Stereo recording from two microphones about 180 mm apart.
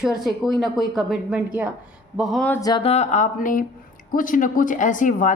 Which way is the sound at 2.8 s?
35° left (ahead or behind).